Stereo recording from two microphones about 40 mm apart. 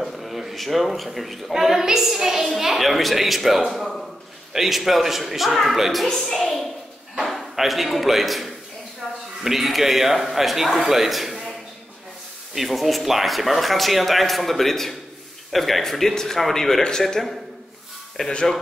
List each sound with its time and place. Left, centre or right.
0.0 s speech: centre
1.5 s a man's voice: centre
9.0 s a sound: centre
9.4 s a man's voice: centre
12.5 s speech: centre
18.2 s speech: centre